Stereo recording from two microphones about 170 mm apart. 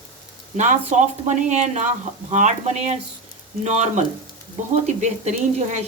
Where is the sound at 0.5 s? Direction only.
45° right (ahead or behind).